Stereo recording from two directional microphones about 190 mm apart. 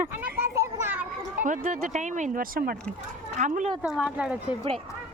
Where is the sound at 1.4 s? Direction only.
40° right (ahead or behind).